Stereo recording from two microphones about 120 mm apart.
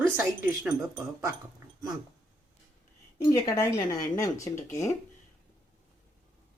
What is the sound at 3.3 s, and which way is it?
Speech, 30° left (ahead or behind).